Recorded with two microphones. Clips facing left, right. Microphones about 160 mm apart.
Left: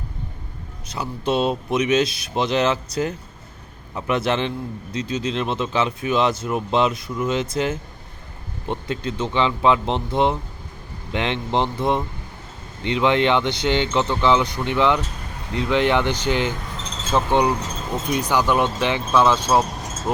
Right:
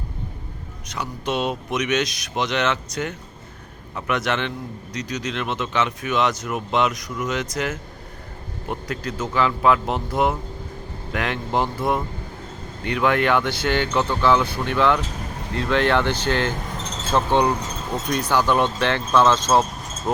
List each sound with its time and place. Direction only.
0.9 s speech: 30° left (ahead or behind); by 19.6 s 10° left (ahead or behind)